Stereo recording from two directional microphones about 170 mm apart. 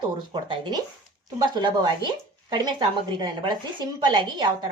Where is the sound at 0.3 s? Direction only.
25° right (ahead or behind).